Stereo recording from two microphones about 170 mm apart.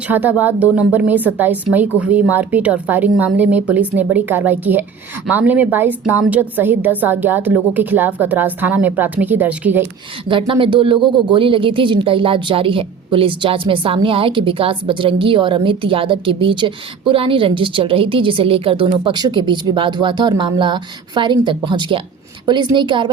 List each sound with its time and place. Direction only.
0.1 s a woman's voice: 10° right (ahead or behind)
10.2 s a woman's voice: 30° right (ahead or behind)